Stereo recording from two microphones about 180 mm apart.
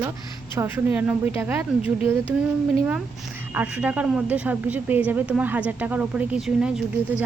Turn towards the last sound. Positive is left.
turn(degrees=-5)  # may be behind; listen again after turning